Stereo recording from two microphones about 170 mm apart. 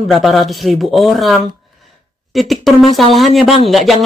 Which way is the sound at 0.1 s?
Centre (ahead or behind).